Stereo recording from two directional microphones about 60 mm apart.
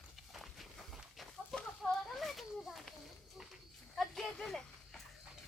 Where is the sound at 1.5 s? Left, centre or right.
Centre.